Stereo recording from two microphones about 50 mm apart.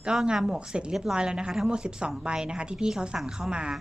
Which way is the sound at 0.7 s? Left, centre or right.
Centre.